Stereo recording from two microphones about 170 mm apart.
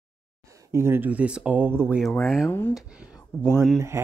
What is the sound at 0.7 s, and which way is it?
Speech, 15° right (ahead or behind).